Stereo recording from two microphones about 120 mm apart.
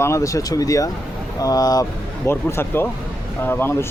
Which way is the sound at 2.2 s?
20° left (ahead or behind).